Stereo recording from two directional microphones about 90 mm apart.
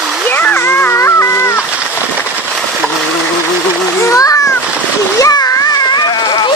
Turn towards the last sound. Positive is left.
turn(degrees=40)  # may be behind; listen again after turning